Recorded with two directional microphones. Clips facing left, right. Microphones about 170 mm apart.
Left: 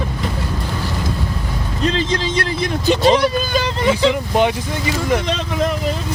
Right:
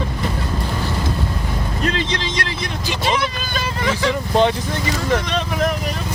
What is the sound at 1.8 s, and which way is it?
Speech, 35° left (ahead or behind).